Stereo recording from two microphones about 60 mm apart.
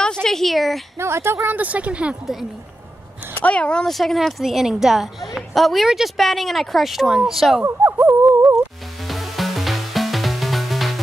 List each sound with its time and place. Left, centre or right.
0.0 s speech: centre
0.9 s a woman's voice: right
1.6 s speech: right
3.3 s speech: left
3.8 s a woman's voice: centre
8.1 s a sound: right
9.0 s music: centre